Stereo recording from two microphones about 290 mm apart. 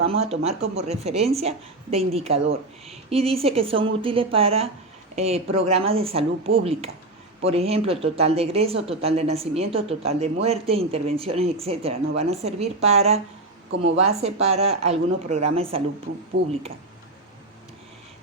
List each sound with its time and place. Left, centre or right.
0.1 s speech: right
16.4 s speech: right